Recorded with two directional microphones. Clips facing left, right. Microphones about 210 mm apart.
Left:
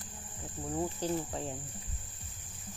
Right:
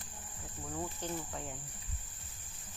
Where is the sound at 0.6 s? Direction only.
30° left (ahead or behind).